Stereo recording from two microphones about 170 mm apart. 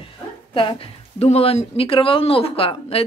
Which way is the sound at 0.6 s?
30° left (ahead or behind).